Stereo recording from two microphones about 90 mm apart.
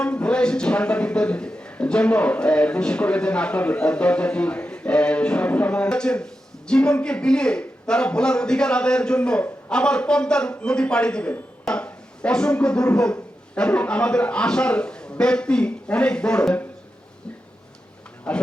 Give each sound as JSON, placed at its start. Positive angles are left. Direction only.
{"t": 0.0, "sound": "a man's voice", "side_deg": 10}
{"t": 18.3, "sound": "speech", "side_deg": 10}